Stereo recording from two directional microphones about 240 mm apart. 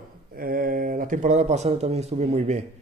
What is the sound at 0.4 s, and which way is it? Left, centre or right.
A man's voice, right.